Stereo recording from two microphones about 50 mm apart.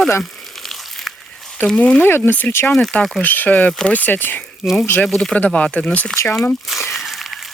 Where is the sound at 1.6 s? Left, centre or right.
Left.